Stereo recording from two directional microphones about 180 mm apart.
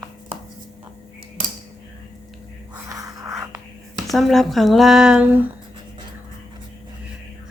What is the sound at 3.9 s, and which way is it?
Speech, centre (ahead or behind).